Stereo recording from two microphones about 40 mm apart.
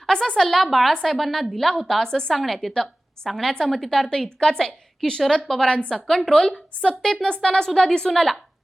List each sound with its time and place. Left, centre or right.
0.0 s a sound: centre
0.3 s a woman's voice: centre
2.4 s a woman's voice: centre
6.2 s a woman's voice: centre